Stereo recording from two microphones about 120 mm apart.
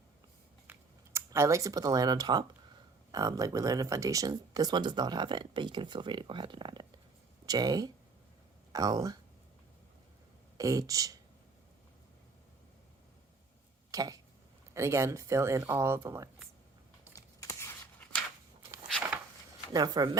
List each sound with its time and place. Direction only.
0.7 s a sound: 25° right (ahead or behind)
3.1 s speech: 30° right (ahead or behind)
10.6 s speech: 30° right (ahead or behind)
13.9 s speech: 30° right (ahead or behind)
17.2 s a sound: 25° left (ahead or behind)
19.7 s speech: 35° right (ahead or behind)